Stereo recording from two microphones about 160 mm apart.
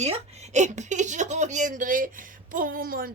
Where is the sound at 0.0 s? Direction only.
45° right (ahead or behind).